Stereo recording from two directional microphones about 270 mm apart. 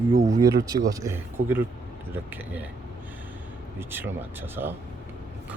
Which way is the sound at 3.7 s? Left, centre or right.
Centre.